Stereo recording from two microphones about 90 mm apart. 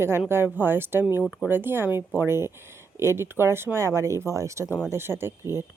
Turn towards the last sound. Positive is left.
turn(degrees=-30)  # may be behind; listen again after turning